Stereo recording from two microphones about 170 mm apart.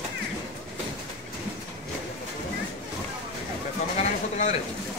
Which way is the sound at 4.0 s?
45° left (ahead or behind).